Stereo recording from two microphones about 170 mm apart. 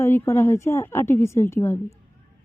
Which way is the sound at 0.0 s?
15° left (ahead or behind).